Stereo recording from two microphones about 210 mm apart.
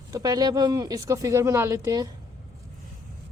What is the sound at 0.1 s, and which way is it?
Speech, 15° right (ahead or behind).